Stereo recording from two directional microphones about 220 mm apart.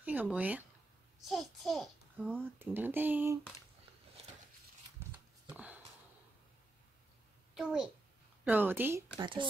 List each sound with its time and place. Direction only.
0.0 s a child's voice: 5° right (ahead or behind)
5.5 s sniff: 5° right (ahead or behind)
7.5 s a child's voice: centre (ahead or behind)
9.1 s speech: 20° right (ahead or behind)